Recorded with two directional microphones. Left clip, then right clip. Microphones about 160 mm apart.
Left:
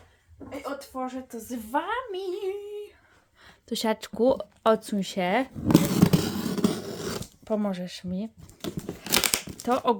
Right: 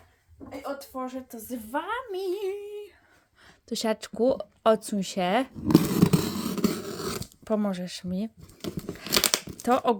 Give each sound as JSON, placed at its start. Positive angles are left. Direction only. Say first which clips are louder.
{"t": 0.6, "sound": "speech", "louder": "left 1 dB", "side_deg": -35}
{"t": 1.7, "sound": "a woman's voice", "louder": "left 3 dB", "side_deg": -10}
{"t": 2.1, "sound": "female singing", "louder": "right 1 dB", "side_deg": -30}
{"t": 3.4, "sound": "speech", "louder": "left 1 dB", "side_deg": -5}
{"t": 5.8, "sound": "a sound", "louder": "left 1 dB", "side_deg": 0}
{"t": 6.1, "sound": "a sound", "louder": "left 1 dB", "side_deg": -20}
{"t": 7.4, "sound": "speech", "louder": "right 1 dB", "side_deg": -20}
{"t": 9.0, "sound": "crumpling", "louder": "even", "side_deg": 20}
{"t": 9.3, "sound": "crumpling", "louder": "right 2 dB", "side_deg": -25}